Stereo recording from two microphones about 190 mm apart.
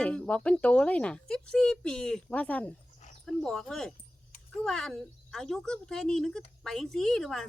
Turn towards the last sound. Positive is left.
turn(degrees=0)  # may be behind; listen again after turning